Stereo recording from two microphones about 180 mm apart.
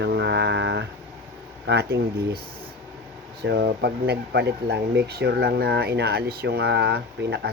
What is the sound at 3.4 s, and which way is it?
Speech, 70° right (ahead or behind).